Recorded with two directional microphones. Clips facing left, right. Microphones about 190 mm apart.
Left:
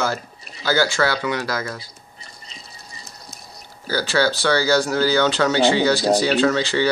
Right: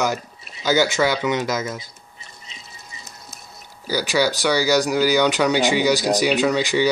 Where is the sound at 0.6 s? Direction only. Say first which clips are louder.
Right 1 dB; 20° right (ahead or behind).